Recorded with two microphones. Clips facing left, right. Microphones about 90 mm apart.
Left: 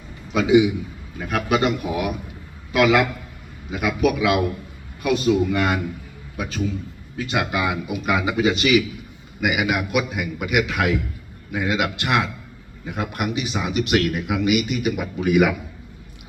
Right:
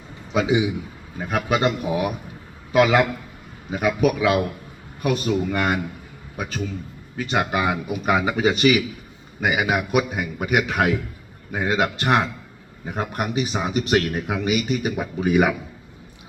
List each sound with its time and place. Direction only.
0.3 s a man's voice: 30° right (ahead or behind)